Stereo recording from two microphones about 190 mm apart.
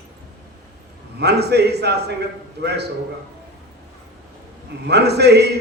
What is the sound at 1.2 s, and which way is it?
A man's voice, 60° right (ahead or behind).